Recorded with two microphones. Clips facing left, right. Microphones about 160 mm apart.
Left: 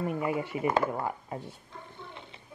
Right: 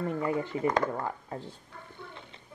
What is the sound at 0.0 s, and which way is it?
Speech, 15° left (ahead or behind).